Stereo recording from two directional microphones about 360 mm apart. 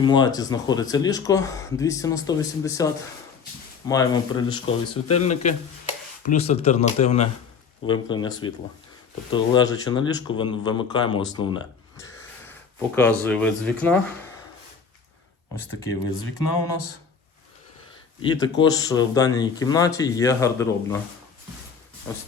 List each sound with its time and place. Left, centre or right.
0.0 s speech: centre
13.0 s speech: centre
16.4 s a sound: left
18.2 s speech: centre